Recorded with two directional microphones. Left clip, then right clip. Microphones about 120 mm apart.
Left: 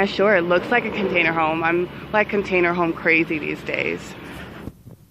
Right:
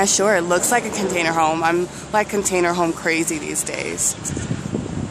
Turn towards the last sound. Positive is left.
turn(degrees=-5)  # may be behind; listen again after turning